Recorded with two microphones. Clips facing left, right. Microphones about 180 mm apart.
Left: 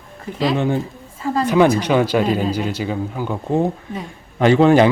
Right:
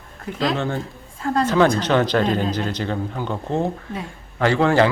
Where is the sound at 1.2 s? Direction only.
Centre (ahead or behind); by 4.9 s 20° left (ahead or behind).